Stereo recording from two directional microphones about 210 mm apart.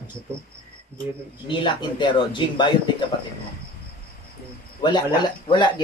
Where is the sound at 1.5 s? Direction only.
20° left (ahead or behind).